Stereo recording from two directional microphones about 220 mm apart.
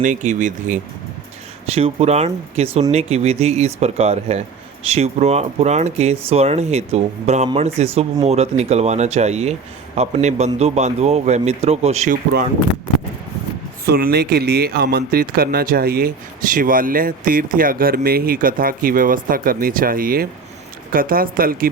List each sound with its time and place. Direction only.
0.0 s speech: 35° right (ahead or behind)
13.8 s speech: 45° right (ahead or behind)